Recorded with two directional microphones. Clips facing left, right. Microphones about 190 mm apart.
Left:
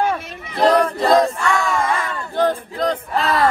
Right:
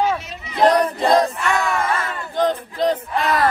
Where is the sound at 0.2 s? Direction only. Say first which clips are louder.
Left 1 dB; 55° left (ahead or behind).